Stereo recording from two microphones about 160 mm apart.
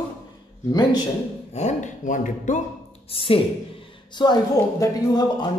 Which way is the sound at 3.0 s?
35° left (ahead or behind).